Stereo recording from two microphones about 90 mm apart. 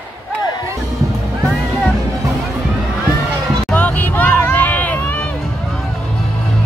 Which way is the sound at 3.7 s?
20° left (ahead or behind).